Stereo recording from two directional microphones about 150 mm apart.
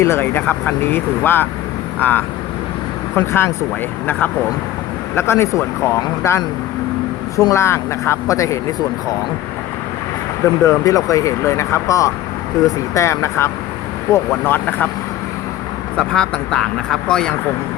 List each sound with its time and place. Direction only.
0.0 s speech: 15° left (ahead or behind)
5.1 s speech: 15° left (ahead or behind)
10.6 s speech: 20° left (ahead or behind)
16.0 s speech: 5° left (ahead or behind)